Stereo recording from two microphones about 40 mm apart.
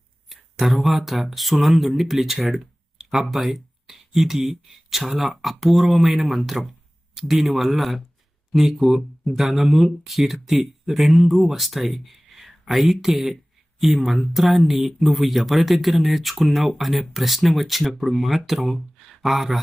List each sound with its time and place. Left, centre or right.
0.3 s speech: centre